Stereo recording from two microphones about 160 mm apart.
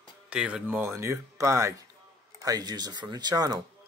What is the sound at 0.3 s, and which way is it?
Speech, 5° right (ahead or behind).